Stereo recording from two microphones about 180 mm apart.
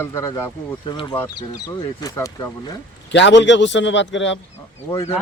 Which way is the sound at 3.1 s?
85° left.